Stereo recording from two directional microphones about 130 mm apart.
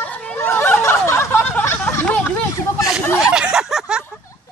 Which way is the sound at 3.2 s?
5° right (ahead or behind).